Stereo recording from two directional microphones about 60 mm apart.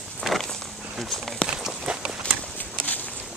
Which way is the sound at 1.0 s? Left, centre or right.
Centre.